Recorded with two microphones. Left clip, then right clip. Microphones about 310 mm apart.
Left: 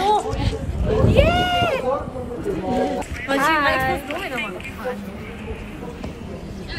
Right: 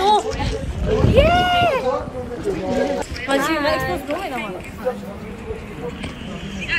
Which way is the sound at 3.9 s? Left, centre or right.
Centre.